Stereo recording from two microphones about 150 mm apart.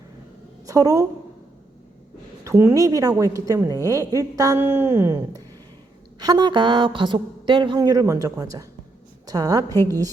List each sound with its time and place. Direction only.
0.7 s a woman's voice: 25° right (ahead or behind)
2.4 s a woman's voice: 20° right (ahead or behind)